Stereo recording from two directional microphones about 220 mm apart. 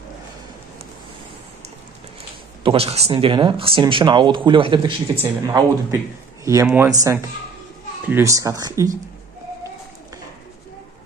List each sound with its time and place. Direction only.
2.6 s speech: 25° right (ahead or behind)
5.2 s speech: 10° right (ahead or behind)